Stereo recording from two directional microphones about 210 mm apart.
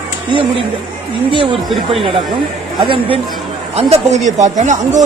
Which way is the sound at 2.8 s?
25° right (ahead or behind).